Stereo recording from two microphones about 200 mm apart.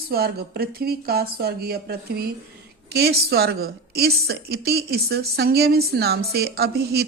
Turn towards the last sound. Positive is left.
turn(degrees=-55)  # may be behind; listen again after turning